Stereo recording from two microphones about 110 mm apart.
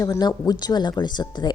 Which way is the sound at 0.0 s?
35° left (ahead or behind).